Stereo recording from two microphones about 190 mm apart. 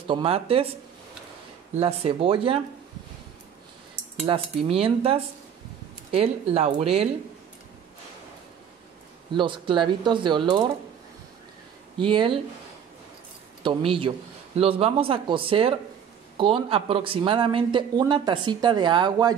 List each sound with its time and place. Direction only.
0.1 s speech: 30° right (ahead or behind)
1.8 s speech: 30° right (ahead or behind)
4.3 s speech: 30° right (ahead or behind)
9.3 s speech: 25° right (ahead or behind)
12.0 s speech: 25° right (ahead or behind)
13.6 s a man's voice: 25° right (ahead or behind)